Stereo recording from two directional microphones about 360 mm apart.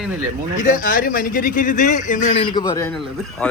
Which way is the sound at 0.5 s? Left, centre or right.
Left.